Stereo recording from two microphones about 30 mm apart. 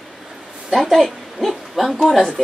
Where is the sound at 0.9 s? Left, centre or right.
Centre.